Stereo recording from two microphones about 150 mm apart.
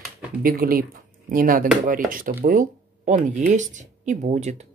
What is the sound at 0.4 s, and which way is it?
Speech, 75° right (ahead or behind).